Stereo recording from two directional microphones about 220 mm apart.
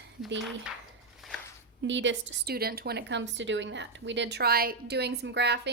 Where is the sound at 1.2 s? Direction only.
Centre (ahead or behind).